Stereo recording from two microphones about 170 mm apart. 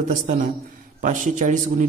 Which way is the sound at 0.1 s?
50° right (ahead or behind).